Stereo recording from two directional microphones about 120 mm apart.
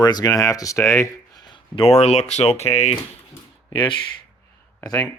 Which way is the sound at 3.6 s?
40° left (ahead or behind).